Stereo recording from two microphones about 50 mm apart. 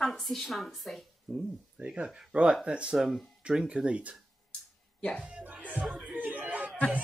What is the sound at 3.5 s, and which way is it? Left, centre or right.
Speech, centre.